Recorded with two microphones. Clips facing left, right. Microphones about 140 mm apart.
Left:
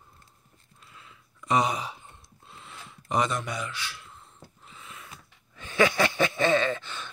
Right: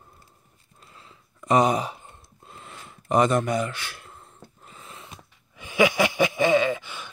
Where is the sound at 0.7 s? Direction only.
35° right (ahead or behind).